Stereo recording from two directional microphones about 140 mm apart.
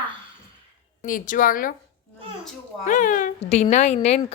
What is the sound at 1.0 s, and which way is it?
Speech, 75° left (ahead or behind).